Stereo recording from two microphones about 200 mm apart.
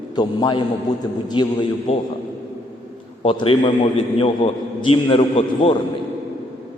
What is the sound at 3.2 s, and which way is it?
A man's voice, 30° left (ahead or behind).